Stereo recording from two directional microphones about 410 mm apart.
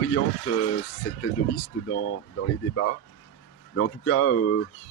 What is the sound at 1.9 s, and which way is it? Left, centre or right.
Speech, left.